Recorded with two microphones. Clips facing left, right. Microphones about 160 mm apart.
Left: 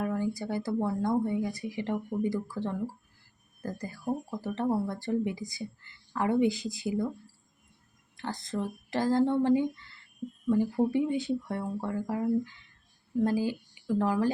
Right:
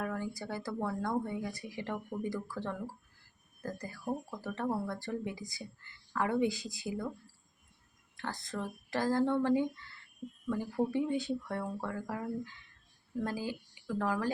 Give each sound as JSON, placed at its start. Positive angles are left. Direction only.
{"t": 0.0, "sound": "speech", "side_deg": 20}
{"t": 8.1, "sound": "speech", "side_deg": 20}
{"t": 10.8, "sound": "speech", "side_deg": 15}